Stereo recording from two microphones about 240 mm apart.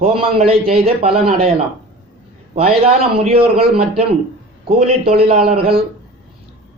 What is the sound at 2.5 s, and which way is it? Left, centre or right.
Speech, right.